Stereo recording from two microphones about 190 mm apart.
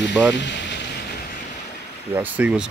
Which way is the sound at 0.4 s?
65° left (ahead or behind).